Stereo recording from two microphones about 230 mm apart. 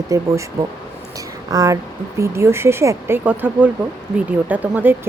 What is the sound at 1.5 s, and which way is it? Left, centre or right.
A woman's voice, centre.